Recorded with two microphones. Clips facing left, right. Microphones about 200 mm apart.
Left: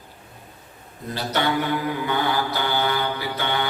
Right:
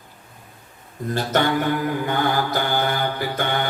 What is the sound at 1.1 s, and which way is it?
Mantra, 50° right (ahead or behind).